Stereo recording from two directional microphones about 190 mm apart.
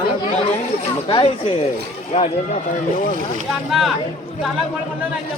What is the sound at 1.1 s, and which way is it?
Speech, 25° left (ahead or behind).